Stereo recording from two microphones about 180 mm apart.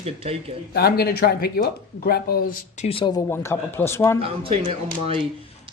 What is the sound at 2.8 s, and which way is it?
Speech, 30° left (ahead or behind).